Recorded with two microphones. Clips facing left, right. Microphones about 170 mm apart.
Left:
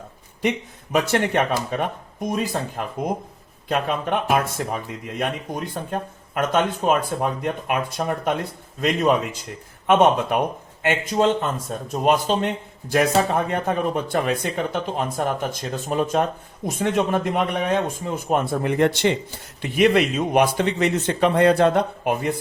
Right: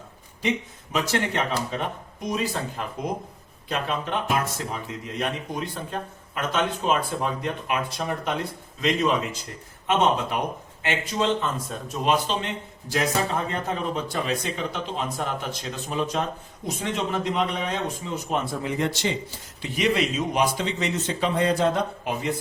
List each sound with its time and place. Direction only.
0.9 s speech: 55° left (ahead or behind)